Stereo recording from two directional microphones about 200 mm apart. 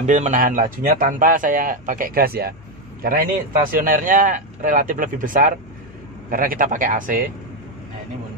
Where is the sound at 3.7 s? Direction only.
45° right (ahead or behind).